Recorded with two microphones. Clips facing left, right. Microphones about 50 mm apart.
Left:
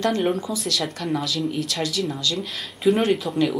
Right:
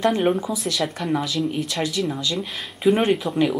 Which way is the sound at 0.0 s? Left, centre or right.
Centre.